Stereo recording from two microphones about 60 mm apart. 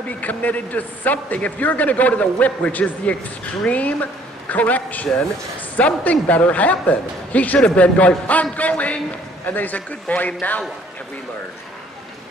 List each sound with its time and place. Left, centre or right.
0.2 s a man's voice: left